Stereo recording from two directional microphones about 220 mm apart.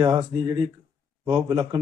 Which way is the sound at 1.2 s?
15° right (ahead or behind).